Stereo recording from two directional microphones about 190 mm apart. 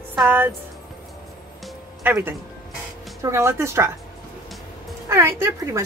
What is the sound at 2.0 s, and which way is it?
A woman's voice, 10° right (ahead or behind).